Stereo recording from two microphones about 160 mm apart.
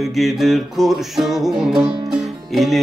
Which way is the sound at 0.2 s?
Centre (ahead or behind).